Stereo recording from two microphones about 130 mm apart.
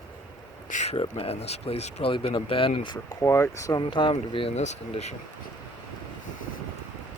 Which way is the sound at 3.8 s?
40° left (ahead or behind).